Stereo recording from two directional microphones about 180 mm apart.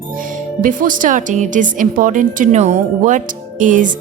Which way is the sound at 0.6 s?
50° right (ahead or behind).